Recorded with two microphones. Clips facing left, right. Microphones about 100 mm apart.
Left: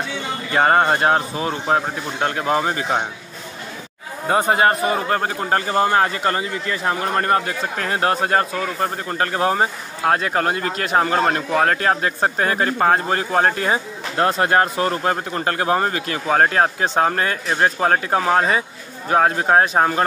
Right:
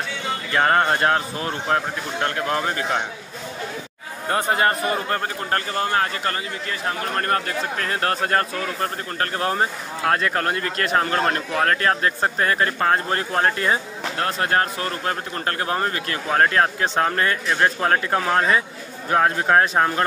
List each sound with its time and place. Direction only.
0.6 s speech: 10° left (ahead or behind)
4.3 s a man's voice: 20° left (ahead or behind)